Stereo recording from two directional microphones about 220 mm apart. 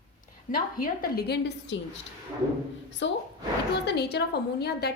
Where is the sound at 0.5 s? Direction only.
40° left (ahead or behind).